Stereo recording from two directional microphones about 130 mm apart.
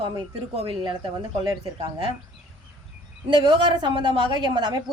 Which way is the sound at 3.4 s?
40° right (ahead or behind).